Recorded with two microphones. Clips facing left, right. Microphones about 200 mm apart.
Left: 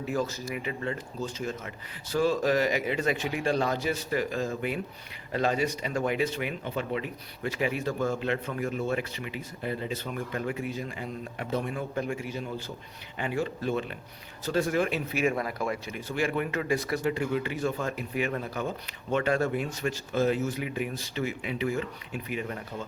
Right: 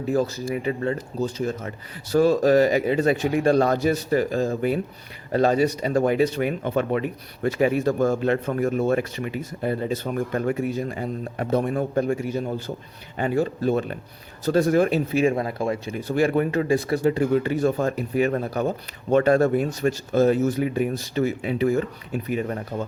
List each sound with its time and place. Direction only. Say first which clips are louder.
0.1 s speech: right 8 dB; 35° right (ahead or behind)